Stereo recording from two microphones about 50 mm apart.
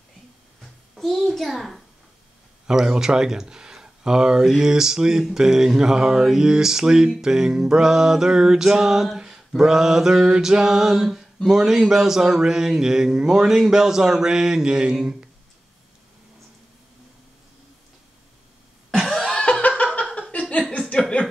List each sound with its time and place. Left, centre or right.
0.9 s a sound: centre
1.5 s a child's voice: centre
18.9 s cough: centre
19.2 s laughter: centre